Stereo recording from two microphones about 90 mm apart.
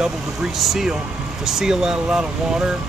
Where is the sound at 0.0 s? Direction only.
5° right (ahead or behind).